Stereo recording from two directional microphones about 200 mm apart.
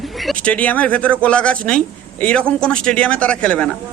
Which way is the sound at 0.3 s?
5° left (ahead or behind).